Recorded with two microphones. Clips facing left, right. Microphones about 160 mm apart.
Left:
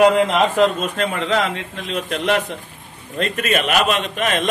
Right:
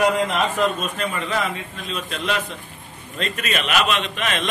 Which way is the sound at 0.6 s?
85° left.